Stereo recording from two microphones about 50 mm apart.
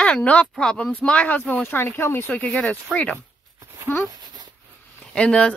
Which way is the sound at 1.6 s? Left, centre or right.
Left.